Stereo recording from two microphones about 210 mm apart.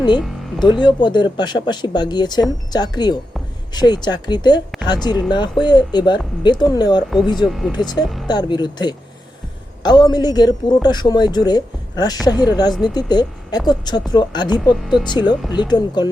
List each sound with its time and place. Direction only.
0.2 s music: centre (ahead or behind)
0.6 s speech: 20° left (ahead or behind)
7.4 s speech: centre (ahead or behind)
7.7 s speech: 20° left (ahead or behind)
14.6 s speech: centre (ahead or behind)
15.0 s speech: 20° left (ahead or behind)